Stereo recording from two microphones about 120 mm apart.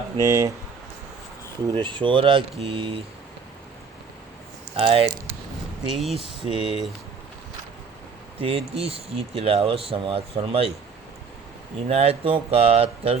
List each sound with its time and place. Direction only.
0.2 s speech: 25° right (ahead or behind)
1.7 s speech: 45° right (ahead or behind)
4.8 s speech: 50° right (ahead or behind)
5.9 s speech: centre (ahead or behind)
6.1 s speech: 50° right (ahead or behind)
8.4 s speech: 50° right (ahead or behind)
11.9 s speech: 55° right (ahead or behind)